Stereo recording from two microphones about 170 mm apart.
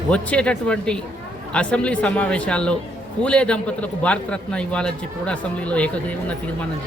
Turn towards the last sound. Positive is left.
turn(degrees=5)  # may be behind; listen again after turning